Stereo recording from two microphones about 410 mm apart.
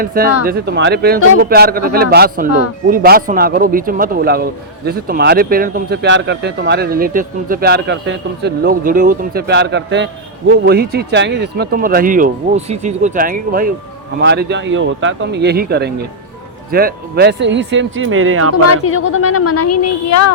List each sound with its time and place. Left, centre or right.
0.0 s speech: right
18.6 s a woman's voice: left